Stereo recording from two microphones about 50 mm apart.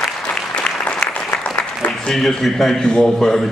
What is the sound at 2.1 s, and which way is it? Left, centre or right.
A man's voice, centre.